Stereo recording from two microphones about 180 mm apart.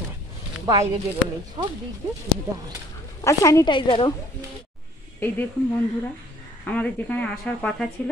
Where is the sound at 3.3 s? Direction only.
15° left (ahead or behind).